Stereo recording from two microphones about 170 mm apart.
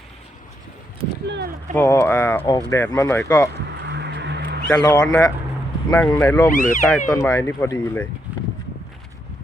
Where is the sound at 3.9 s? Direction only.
85° right.